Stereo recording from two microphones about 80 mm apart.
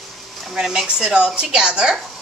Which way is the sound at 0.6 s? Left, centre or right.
Centre.